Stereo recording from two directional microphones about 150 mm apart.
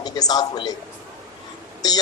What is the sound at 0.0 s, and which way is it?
Speech, 25° left (ahead or behind).